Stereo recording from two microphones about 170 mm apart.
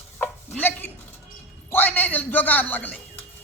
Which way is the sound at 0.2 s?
10° left (ahead or behind).